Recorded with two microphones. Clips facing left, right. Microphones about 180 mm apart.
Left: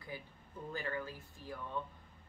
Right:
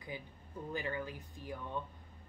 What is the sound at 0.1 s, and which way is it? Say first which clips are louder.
Speech: right 2 dB; 15° right (ahead or behind).